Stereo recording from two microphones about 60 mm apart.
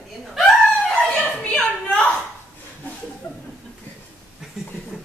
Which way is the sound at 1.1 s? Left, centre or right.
Centre.